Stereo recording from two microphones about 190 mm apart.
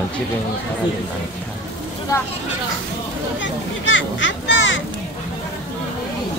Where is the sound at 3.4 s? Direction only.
80° left.